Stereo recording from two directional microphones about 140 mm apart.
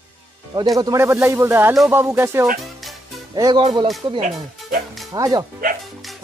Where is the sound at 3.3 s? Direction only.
30° right (ahead or behind).